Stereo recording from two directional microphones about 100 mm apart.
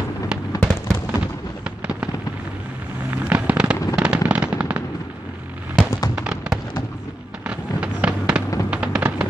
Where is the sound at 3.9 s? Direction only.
10° right (ahead or behind).